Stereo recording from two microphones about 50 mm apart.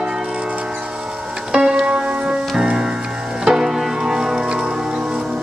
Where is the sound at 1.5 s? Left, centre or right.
Centre.